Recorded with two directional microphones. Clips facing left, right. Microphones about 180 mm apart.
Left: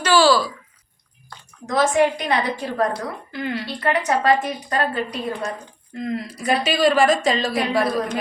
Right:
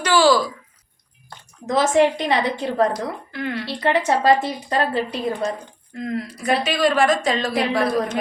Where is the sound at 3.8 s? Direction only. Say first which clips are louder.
Right 2 dB; 25° right (ahead or behind).